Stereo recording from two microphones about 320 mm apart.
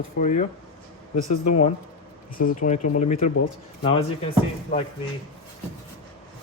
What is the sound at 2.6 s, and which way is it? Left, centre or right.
Speech, left.